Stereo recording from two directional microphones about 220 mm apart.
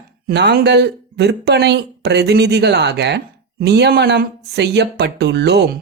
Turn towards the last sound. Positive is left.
turn(degrees=-50)  # may be behind; listen again after turning